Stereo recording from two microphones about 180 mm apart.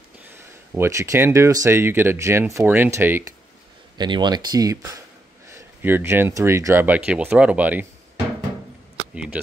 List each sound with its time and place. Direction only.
0.7 s speech: 15° right (ahead or behind)
4.0 s speech: 25° right (ahead or behind); by 7.8 s 10° right (ahead or behind)
9.1 s speech: 5° right (ahead or behind)